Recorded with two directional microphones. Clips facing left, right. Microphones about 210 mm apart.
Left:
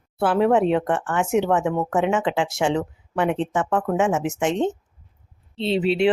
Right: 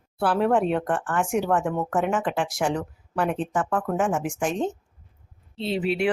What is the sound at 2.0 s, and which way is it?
Speech, 25° left (ahead or behind).